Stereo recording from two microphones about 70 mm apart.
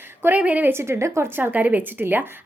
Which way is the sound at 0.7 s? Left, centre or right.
Right.